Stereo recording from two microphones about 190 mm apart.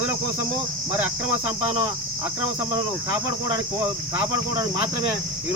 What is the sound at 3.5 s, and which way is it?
Cricket, 15° right (ahead or behind).